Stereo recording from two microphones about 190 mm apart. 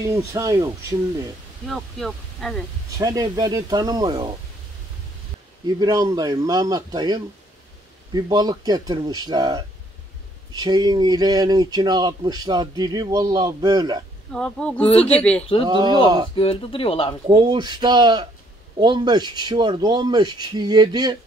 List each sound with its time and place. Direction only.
0.0 s speech: 15° right (ahead or behind)
1.7 s speech: centre (ahead or behind)
3.0 s speech: 20° right (ahead or behind)
5.8 s speech: 20° right (ahead or behind)
14.3 s a man's voice: 5° left (ahead or behind)
15.6 s speech: 25° right (ahead or behind)
16.3 s speech: 30° left (ahead or behind)
17.3 s speech: 20° right (ahead or behind)